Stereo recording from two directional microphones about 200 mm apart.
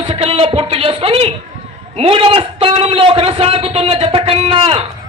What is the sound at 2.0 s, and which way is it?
A man's voice, 30° right (ahead or behind).